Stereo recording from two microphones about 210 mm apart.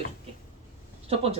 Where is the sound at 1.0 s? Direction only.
30° right (ahead or behind).